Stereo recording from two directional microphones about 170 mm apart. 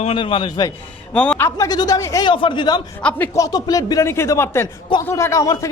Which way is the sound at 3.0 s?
10° left (ahead or behind).